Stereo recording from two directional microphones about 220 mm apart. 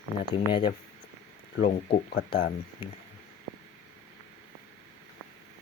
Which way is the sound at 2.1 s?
40° left (ahead or behind).